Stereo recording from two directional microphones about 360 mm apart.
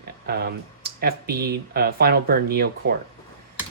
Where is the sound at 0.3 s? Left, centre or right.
Right.